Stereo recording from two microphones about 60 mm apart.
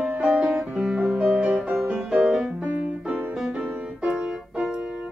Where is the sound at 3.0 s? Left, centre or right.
Centre.